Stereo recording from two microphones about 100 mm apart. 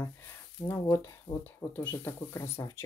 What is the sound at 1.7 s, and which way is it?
Speech, 20° left (ahead or behind).